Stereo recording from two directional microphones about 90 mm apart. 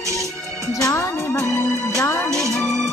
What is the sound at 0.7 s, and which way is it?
Music, 35° left (ahead or behind).